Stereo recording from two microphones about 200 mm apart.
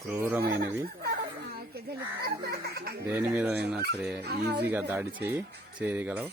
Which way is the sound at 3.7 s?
55° right (ahead or behind).